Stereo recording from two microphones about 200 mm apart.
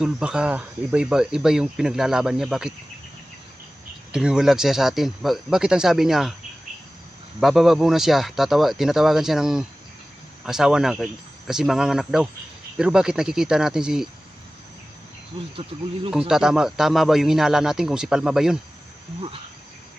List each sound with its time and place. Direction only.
0.0 s speech: 5° right (ahead or behind)
4.1 s speech: 5° right (ahead or behind)
7.3 s speech: centre (ahead or behind)
15.3 s insect: 25° right (ahead or behind)
16.1 s speech: 5° right (ahead or behind)